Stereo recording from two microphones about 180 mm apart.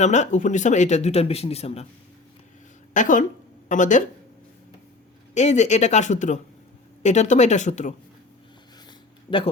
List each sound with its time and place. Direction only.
0.0 s speech: 40° left (ahead or behind)
2.9 s a woman's voice: 45° left (ahead or behind)
5.3 s speech: 40° left (ahead or behind)
9.3 s speech: 30° left (ahead or behind)